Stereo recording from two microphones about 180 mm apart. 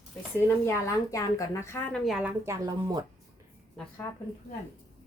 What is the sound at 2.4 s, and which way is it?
Speech, 20° right (ahead or behind).